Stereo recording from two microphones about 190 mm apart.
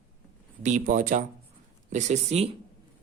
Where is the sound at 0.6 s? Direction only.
40° right (ahead or behind).